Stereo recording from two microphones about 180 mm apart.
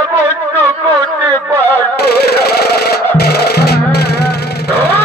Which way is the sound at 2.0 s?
60° left (ahead or behind).